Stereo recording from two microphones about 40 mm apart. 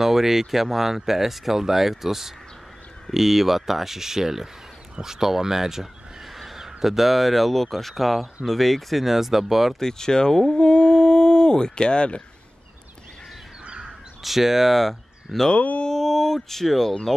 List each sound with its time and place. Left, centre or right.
0.0 s speech: centre
9.8 s speech: centre
13.7 s crow: right
14.2 s speech: centre
15.5 s speech: left
15.8 s speech: centre